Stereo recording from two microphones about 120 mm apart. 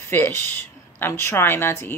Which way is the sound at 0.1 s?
20° left (ahead or behind).